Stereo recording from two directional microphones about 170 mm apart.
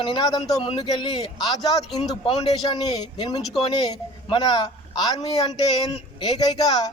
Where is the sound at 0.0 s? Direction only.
25° left (ahead or behind).